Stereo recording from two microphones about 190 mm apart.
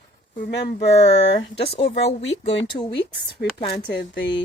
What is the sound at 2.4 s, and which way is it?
Speech, 30° left (ahead or behind).